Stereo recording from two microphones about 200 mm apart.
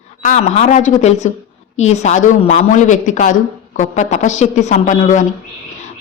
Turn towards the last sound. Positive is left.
turn(degrees=40)  # may be behind; listen again after turning